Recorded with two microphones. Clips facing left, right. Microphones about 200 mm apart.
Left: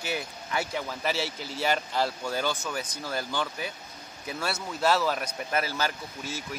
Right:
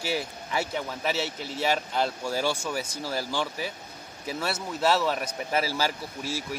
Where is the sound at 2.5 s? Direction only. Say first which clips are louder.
Right 2 dB; 15° right (ahead or behind).